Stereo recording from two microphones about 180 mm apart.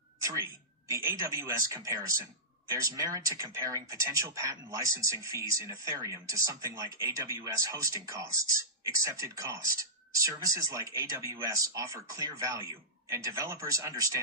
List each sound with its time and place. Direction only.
0.2 s speech: 15° right (ahead or behind)